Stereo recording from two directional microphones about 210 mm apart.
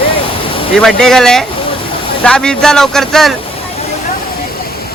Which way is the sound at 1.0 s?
Centre (ahead or behind).